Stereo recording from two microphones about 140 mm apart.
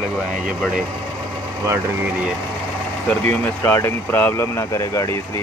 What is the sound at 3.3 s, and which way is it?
Speech, 15° left (ahead or behind).